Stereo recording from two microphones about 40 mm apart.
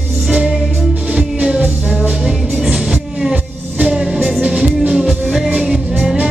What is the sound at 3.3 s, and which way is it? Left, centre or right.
Music, right.